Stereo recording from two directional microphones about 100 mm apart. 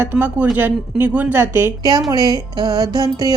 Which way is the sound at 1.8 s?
40° right (ahead or behind).